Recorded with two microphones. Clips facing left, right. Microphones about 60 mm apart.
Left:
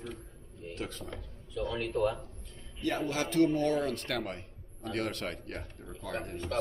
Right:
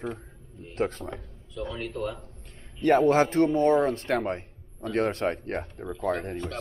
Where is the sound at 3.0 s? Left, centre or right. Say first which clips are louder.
Right 3 dB; right.